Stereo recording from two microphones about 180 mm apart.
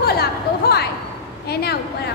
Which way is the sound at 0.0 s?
60° left (ahead or behind).